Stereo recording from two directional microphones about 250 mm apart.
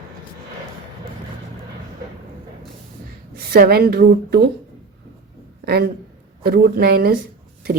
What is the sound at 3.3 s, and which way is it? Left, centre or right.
A woman's voice, right.